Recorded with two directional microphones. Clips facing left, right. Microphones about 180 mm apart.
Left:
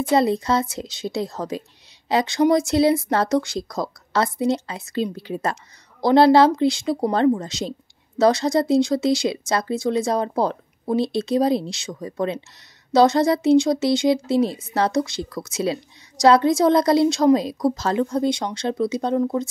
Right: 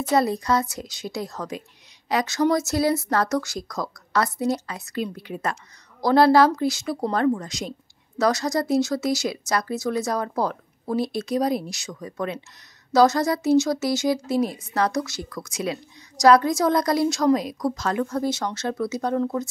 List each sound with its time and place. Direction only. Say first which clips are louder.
0.1 s a woman's voice: left 2 dB; 25° left (ahead or behind)